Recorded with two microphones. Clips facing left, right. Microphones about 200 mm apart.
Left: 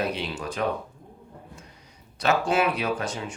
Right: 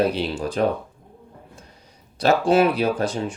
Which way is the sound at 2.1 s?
35° right (ahead or behind).